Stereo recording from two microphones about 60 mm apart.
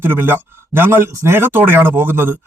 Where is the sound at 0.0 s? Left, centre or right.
Right.